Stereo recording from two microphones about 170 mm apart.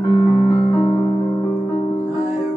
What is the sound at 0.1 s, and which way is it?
Piano, 20° left (ahead or behind).